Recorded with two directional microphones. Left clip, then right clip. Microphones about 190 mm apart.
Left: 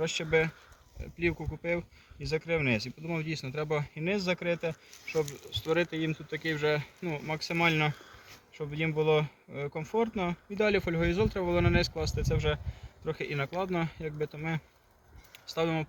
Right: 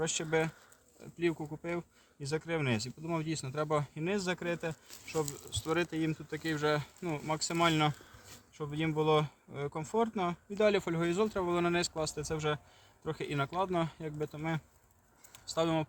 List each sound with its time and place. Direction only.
0.0 s speech: 25° right (ahead or behind)